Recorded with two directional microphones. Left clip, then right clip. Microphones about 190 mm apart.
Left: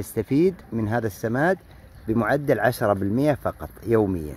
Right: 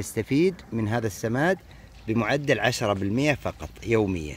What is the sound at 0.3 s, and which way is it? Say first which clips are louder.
Speech: left 2 dB; 5° left (ahead or behind).